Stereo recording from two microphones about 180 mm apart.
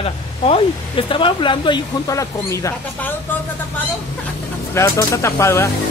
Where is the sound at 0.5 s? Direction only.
30° left (ahead or behind).